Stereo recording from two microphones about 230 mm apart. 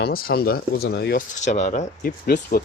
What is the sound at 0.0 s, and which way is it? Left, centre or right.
Speech, left.